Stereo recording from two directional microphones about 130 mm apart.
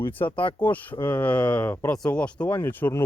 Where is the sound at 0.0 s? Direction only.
15° left (ahead or behind).